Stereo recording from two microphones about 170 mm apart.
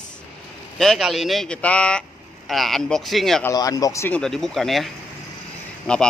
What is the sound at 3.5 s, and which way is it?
Speech, 20° left (ahead or behind).